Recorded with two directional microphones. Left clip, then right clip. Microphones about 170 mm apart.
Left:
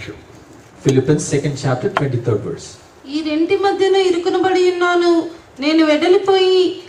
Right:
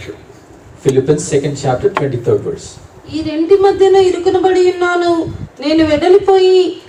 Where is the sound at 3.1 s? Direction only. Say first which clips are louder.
Right 5 dB; 20° left (ahead or behind).